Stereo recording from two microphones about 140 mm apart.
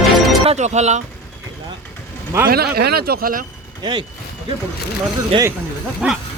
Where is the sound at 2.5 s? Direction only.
90° right.